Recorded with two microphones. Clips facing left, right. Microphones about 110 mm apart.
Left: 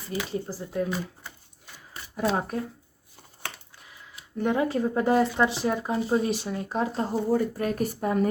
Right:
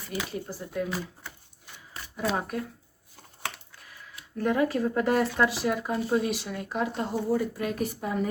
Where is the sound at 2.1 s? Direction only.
35° left (ahead or behind).